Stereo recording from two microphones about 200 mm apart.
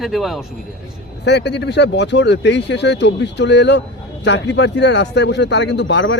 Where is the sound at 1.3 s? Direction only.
60° left (ahead or behind).